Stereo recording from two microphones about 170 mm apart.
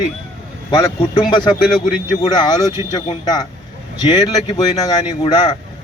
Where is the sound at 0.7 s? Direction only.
20° left (ahead or behind).